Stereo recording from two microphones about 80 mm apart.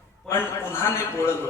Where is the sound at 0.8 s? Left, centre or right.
Left.